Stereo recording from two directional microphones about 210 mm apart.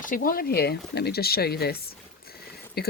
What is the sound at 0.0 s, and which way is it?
Speech, 40° left (ahead or behind).